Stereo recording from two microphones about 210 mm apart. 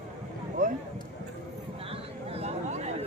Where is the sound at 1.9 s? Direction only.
30° right (ahead or behind).